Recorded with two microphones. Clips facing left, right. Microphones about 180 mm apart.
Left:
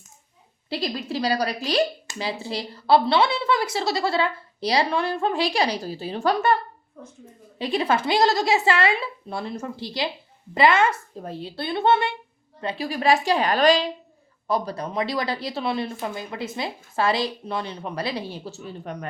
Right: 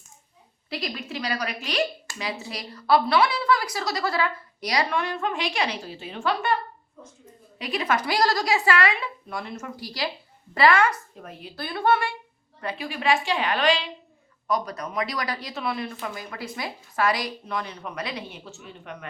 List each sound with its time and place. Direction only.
0.7 s a woman's voice: 30° left (ahead or behind)
7.6 s a woman's voice: 30° left (ahead or behind)